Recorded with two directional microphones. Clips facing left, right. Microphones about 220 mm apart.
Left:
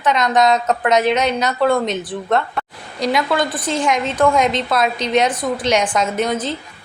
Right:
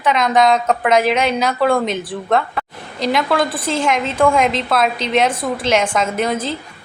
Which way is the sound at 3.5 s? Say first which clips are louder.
Right 1 dB; 30° right (ahead or behind).